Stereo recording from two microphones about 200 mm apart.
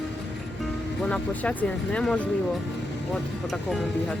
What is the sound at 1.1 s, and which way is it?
Speech, 5° left (ahead or behind).